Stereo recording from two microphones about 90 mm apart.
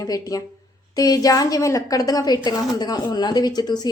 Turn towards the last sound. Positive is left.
turn(degrees=50)  # may be behind; listen again after turning